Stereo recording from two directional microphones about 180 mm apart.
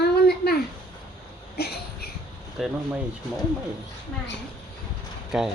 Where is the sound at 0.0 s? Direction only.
60° left (ahead or behind).